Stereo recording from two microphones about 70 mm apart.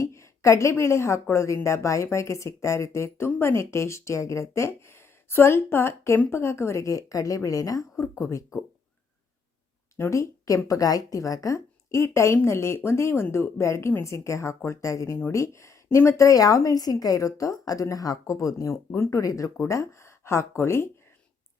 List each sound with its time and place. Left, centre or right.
0.0 s a woman's voice: left
7.9 s a woman's voice: left
10.1 s a woman's voice: left